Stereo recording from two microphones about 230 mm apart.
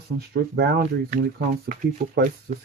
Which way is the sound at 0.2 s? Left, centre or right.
Right.